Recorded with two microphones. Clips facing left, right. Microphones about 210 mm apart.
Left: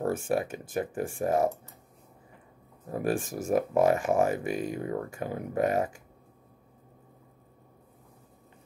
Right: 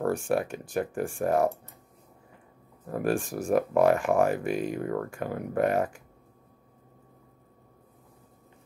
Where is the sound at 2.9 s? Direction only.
20° left (ahead or behind).